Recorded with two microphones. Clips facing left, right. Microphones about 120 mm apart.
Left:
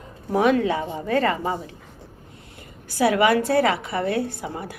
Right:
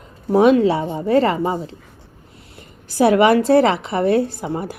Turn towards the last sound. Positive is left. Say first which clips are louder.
# right 7 dB
turn(degrees=-30)  # may be behind; listen again after turning